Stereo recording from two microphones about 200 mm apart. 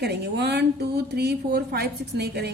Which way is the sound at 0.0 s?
55° right (ahead or behind).